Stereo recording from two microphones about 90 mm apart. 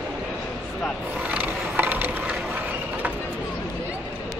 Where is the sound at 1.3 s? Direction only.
20° right (ahead or behind).